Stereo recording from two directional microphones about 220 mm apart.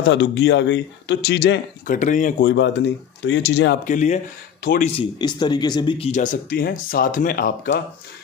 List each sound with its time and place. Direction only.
0.0 s a man's voice: 55° left (ahead or behind)
1.9 s speech: 35° left (ahead or behind)
2.4 s a man's voice: 55° left (ahead or behind)
3.8 s speech: 35° left (ahead or behind)